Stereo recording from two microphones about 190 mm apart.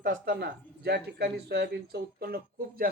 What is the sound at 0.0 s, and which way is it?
Speech, 50° right (ahead or behind).